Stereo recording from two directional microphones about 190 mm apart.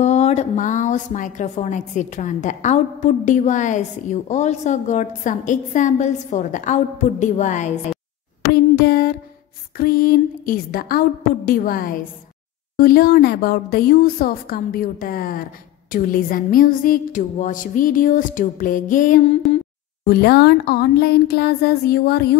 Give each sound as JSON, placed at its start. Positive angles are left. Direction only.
{"t": 0.0, "sound": "a woman's voice", "side_deg": 35}
{"t": 8.5, "sound": "a sound", "side_deg": 55}
{"t": 9.8, "sound": "a woman's voice", "side_deg": 50}
{"t": 20.1, "sound": "speech", "side_deg": 60}